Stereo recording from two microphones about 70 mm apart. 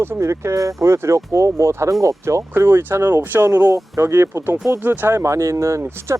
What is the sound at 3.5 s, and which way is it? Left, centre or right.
Speech, right.